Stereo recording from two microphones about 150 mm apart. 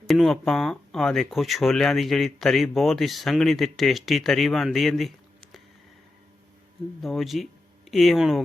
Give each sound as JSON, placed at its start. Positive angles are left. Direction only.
{"t": 0.1, "sound": "speech", "side_deg": 0}
{"t": 7.0, "sound": "speech", "side_deg": 0}